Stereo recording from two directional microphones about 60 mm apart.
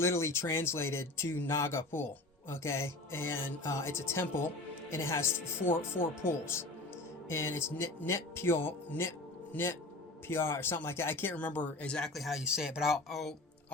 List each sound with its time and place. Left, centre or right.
0.0 s a man's voice: left
11.3 s speech: left
11.9 s speech: centre
12.4 s speech: centre